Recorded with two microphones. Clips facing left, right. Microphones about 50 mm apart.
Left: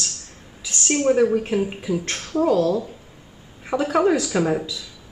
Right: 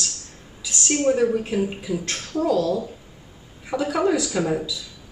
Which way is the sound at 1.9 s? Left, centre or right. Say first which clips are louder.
Left 2 dB; left.